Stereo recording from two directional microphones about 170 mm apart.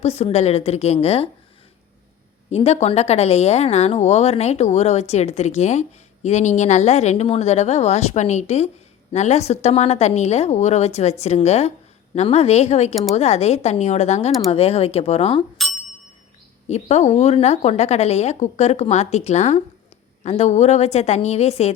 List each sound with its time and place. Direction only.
0.0 s speech: 35° left (ahead or behind)
2.5 s speech: 40° left (ahead or behind)
16.6 s speech: 40° left (ahead or behind)